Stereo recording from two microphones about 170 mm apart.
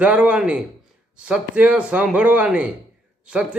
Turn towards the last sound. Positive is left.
turn(degrees=-5)  # may be behind; listen again after turning